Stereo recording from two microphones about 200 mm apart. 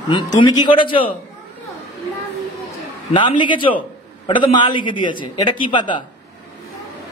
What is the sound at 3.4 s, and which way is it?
A man's voice, 25° left (ahead or behind).